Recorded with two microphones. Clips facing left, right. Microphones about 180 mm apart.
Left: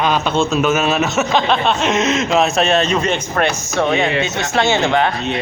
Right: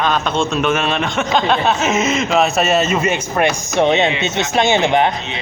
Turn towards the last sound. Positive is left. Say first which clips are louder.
# right 1 dB
turn(degrees=-20)  # may be behind; listen again after turning